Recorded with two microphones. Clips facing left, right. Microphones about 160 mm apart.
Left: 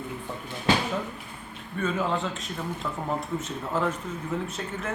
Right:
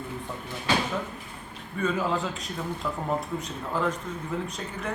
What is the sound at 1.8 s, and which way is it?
A man's voice, centre (ahead or behind).